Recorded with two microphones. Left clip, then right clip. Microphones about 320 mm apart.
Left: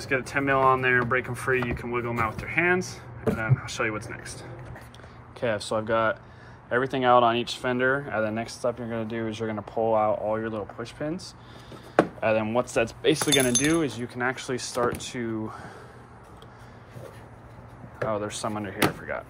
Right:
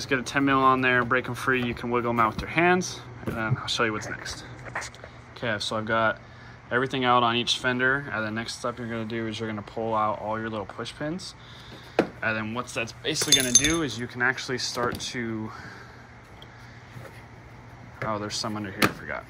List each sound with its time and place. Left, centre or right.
0.0 s speech: centre
12.2 s a sound: centre
13.7 s speech: centre
18.0 s speech: centre